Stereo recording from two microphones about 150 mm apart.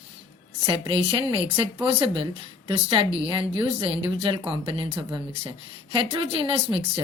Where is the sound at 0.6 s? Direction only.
35° right (ahead or behind).